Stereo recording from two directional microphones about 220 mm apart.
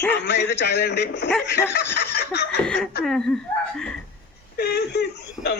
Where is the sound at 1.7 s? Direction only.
50° left (ahead or behind).